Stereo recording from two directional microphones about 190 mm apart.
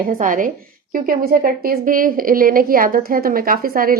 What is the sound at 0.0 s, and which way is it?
Speech, 45° right (ahead or behind).